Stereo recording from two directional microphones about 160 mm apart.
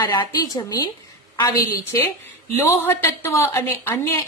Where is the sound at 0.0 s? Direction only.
25° left (ahead or behind).